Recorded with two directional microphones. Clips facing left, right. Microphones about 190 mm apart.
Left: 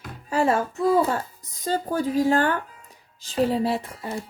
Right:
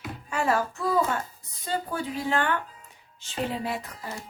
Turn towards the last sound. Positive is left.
turn(degrees=30)  # may be behind; listen again after turning